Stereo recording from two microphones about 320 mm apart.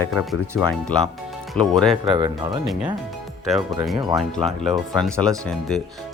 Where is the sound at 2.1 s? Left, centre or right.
Centre.